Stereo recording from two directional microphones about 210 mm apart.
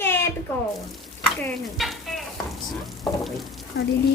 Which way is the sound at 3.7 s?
55° left (ahead or behind).